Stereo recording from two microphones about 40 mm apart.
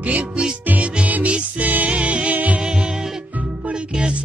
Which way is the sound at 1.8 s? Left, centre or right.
Right.